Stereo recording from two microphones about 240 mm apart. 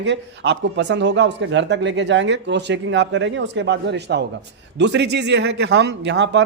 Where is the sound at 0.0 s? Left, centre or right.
Right.